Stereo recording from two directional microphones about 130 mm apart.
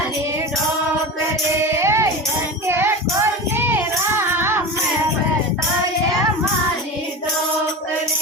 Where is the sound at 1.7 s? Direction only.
20° right (ahead or behind).